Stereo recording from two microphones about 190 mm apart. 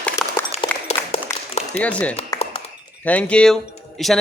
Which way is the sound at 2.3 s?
15° left (ahead or behind).